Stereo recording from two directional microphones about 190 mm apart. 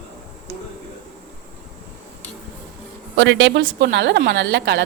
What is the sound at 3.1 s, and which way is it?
A woman's voice, 75° right (ahead or behind).